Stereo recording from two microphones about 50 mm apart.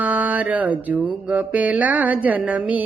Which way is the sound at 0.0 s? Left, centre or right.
Right.